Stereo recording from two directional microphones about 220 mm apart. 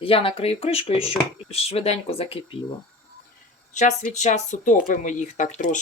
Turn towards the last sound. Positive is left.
turn(degrees=35)  # may be behind; listen again after turning